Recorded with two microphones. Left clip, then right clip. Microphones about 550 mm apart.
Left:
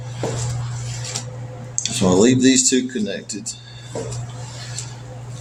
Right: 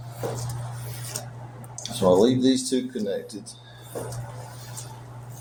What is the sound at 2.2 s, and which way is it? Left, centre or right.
Speech, centre.